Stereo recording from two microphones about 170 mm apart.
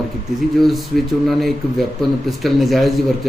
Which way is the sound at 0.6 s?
Centre (ahead or behind).